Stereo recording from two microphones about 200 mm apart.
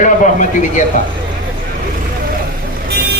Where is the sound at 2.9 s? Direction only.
50° right (ahead or behind).